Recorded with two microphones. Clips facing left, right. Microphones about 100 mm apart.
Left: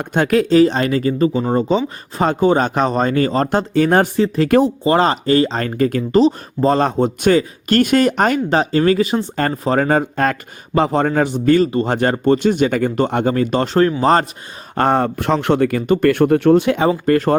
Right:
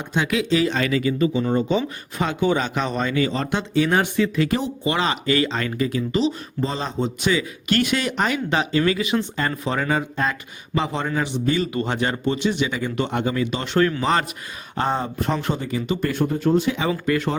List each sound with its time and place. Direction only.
0.0 s speech: 50° left (ahead or behind)
11.7 s speech: 35° left (ahead or behind)
11.9 s speech: 45° left (ahead or behind)
14.8 s speech: 65° left (ahead or behind)
17.1 s speech: 45° left (ahead or behind)